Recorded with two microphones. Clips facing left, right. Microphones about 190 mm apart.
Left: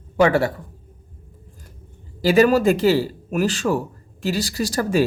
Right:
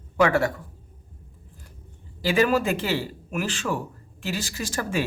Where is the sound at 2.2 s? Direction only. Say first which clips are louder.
Left 6 dB; 40° left (ahead or behind).